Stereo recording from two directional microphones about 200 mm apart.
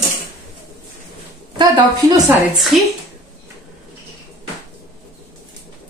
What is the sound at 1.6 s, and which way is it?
Speech, 20° right (ahead or behind).